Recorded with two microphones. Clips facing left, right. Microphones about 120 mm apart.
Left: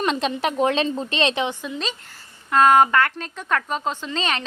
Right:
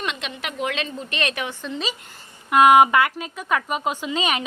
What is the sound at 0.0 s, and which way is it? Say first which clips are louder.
A woman's voice: left 8 dB; 35° left (ahead or behind).